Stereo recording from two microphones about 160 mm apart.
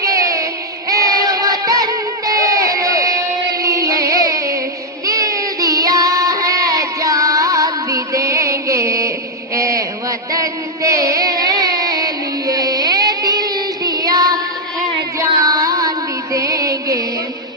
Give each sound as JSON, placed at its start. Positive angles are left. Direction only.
{"t": 0.0, "sound": "music", "side_deg": -20}
{"t": 5.0, "sound": "child singing", "side_deg": -20}
{"t": 9.6, "sound": "music", "side_deg": -20}